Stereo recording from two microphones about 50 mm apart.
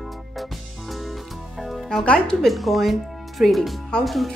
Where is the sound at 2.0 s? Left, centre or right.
Centre.